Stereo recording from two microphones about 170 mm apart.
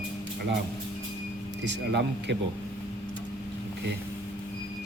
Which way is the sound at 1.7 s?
90° right.